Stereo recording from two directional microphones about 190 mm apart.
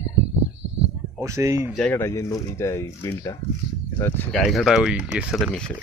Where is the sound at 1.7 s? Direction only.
5° left (ahead or behind).